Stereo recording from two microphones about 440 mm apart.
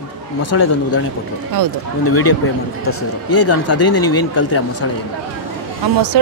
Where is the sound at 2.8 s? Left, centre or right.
Left.